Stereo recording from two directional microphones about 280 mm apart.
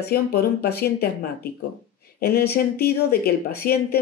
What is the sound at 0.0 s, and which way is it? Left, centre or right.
Speech, left.